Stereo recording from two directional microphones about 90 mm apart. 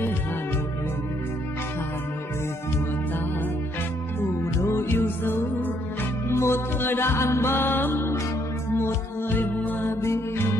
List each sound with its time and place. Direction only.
4.2 s music: 30° left (ahead or behind)